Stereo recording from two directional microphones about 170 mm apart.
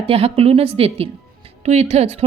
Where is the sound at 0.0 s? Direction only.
35° right (ahead or behind).